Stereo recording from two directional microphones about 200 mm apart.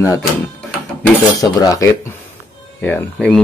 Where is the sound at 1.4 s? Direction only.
15° left (ahead or behind).